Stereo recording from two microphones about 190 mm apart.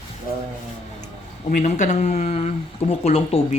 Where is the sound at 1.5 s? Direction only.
40° left (ahead or behind).